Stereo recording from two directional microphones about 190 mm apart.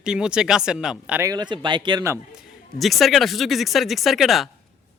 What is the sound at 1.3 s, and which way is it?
Speech, 20° right (ahead or behind).